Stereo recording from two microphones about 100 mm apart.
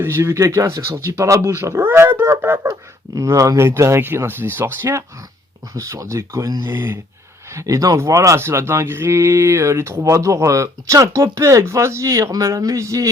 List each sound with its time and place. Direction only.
0.0 s speech: 25° right (ahead or behind)